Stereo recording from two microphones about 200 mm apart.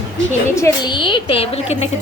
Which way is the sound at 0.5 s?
20° left (ahead or behind).